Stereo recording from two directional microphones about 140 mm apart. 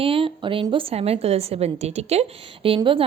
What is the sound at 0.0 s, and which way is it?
A woman's voice, 40° right (ahead or behind).